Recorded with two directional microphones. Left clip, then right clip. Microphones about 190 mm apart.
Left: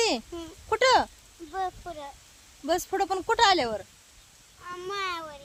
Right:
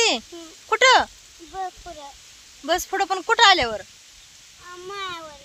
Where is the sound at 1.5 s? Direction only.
20° left (ahead or behind).